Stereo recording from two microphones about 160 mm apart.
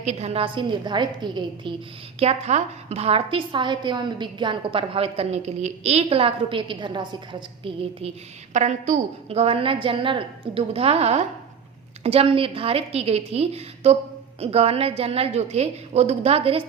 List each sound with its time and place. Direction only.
0.0 s a woman's voice: 45° right (ahead or behind); by 1.7 s 25° right (ahead or behind)
2.1 s a woman's voice: 40° right (ahead or behind)
8.5 s a woman's voice: 50° right (ahead or behind)